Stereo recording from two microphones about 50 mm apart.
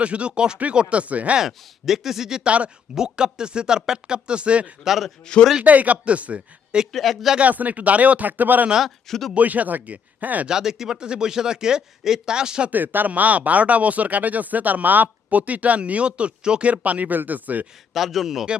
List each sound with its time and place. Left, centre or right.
0.0 s speech: right
1.4 s speech: centre
2.4 s speech: right
2.9 s speech: centre
4.8 s a man's voice: centre
5.2 s speech: centre
5.6 s speech: right
6.9 s a man's voice: centre
7.3 s speech: right
9.0 s a man's voice: centre
9.3 s speech: right
10.4 s speech: centre
12.7 s speech: right
17.9 s a man's voice: centre